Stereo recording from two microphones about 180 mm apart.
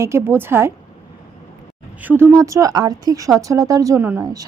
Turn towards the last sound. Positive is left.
turn(degrees=-15)  # may be behind; listen again after turning